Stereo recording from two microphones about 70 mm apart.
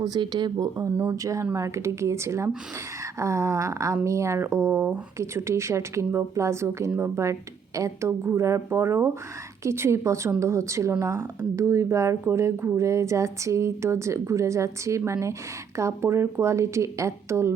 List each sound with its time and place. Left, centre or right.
0.0 s speech: right
1.1 s speech: right